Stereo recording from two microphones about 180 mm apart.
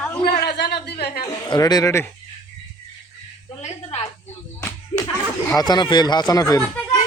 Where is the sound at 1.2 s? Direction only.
20° left (ahead or behind).